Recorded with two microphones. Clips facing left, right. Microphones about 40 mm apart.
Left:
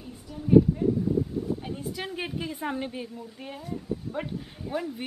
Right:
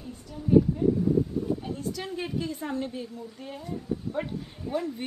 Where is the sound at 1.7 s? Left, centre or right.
Left.